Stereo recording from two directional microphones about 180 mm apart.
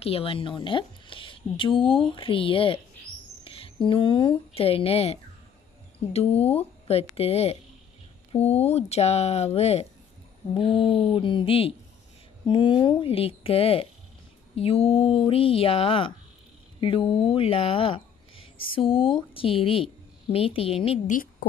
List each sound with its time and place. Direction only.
0.0 s a woman's voice: 30° left (ahead or behind)
21.1 s a woman's voice: 50° left (ahead or behind)